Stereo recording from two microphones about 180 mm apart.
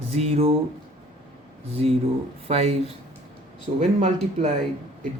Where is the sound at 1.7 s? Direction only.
35° right (ahead or behind).